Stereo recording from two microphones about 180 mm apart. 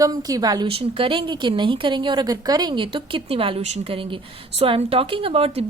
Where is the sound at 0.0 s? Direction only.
20° right (ahead or behind).